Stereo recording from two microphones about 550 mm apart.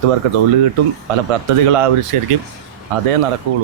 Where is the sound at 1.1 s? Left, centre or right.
Right.